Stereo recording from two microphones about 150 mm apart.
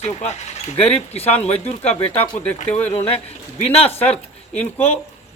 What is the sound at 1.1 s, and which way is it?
Speech, 45° left (ahead or behind).